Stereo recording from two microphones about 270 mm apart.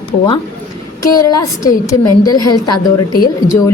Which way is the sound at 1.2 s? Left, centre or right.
Centre.